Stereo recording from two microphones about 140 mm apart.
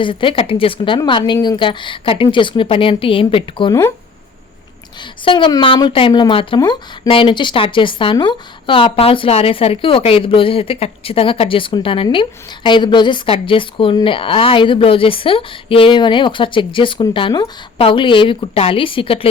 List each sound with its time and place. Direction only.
0.0 s speech: 35° left (ahead or behind)
3.7 s speech: 20° left (ahead or behind)
5.2 s speech: 35° left (ahead or behind)
6.6 s speech: 25° left (ahead or behind)
7.1 s speech: 40° left (ahead or behind)